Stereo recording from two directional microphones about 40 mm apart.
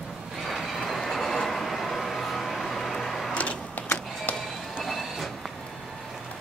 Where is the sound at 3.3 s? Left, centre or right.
Left.